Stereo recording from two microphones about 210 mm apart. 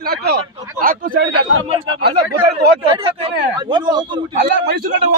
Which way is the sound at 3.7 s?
20° right (ahead or behind).